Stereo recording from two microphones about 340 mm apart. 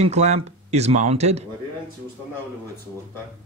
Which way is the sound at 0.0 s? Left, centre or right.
Centre.